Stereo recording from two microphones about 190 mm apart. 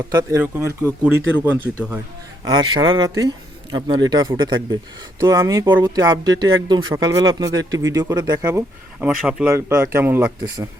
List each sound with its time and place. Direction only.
0.1 s speech: 20° right (ahead or behind)
2.4 s speech: 25° right (ahead or behind)